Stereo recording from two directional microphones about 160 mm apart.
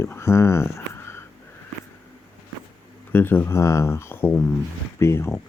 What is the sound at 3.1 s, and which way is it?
Speech, 10° left (ahead or behind).